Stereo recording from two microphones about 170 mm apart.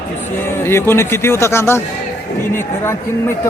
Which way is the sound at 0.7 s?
15° left (ahead or behind).